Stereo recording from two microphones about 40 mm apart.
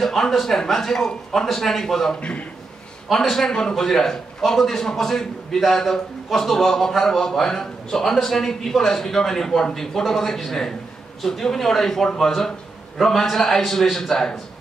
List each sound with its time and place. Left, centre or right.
0.0 s a man's voice: centre
2.1 s a man's voice: left
3.1 s a man's voice: centre